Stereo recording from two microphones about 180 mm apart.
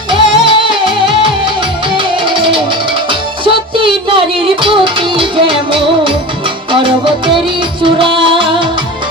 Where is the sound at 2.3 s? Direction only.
30° right (ahead or behind).